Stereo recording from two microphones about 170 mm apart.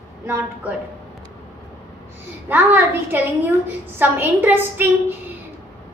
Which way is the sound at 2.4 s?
10° right (ahead or behind).